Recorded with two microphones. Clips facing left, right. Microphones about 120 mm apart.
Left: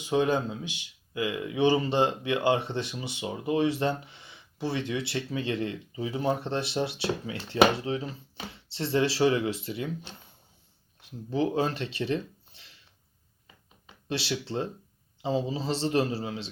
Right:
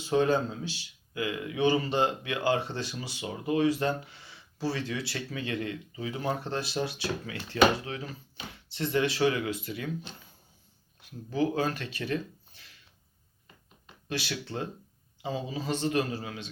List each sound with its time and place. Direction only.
0.0 s speech: 15° left (ahead or behind)
11.3 s speech: 25° left (ahead or behind)
14.1 s speech: 25° left (ahead or behind)